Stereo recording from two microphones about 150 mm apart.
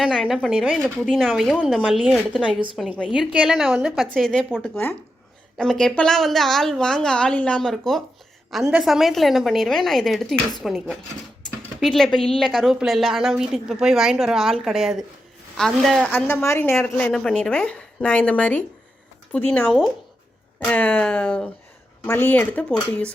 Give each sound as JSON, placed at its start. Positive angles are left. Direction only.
{"t": 0.0, "sound": "a woman's voice", "side_deg": -5}
{"t": 3.9, "sound": "a woman's voice", "side_deg": 0}
{"t": 16.1, "sound": "a woman's voice", "side_deg": 15}
{"t": 16.7, "sound": "a woman's voice", "side_deg": 5}